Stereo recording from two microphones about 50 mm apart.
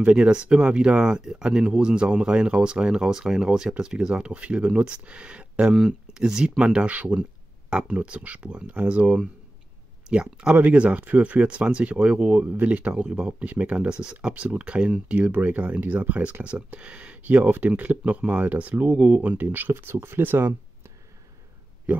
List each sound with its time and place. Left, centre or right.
0.0 s speech: centre
5.7 s speech: centre
6.1 s speech: centre
10.5 s speech: right